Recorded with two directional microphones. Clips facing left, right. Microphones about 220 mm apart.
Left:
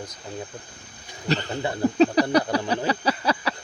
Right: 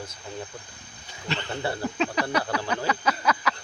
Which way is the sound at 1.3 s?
40° left (ahead or behind).